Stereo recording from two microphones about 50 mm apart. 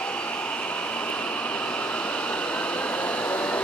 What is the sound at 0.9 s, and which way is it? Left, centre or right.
Vehicle, left.